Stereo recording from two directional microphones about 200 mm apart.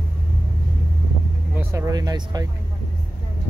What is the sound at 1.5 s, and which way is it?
Speech, 10° right (ahead or behind).